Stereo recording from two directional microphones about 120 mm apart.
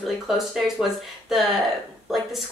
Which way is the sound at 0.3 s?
Centre (ahead or behind).